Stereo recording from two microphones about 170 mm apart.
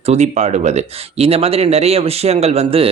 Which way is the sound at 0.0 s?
40° right (ahead or behind).